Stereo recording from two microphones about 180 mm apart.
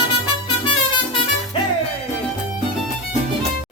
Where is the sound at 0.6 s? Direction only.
25° left (ahead or behind).